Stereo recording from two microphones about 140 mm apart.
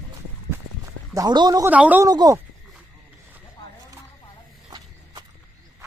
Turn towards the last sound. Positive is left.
turn(degrees=-30)  # may be behind; listen again after turning